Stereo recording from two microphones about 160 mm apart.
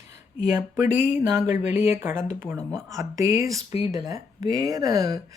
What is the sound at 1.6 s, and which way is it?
Speech, 15° right (ahead or behind).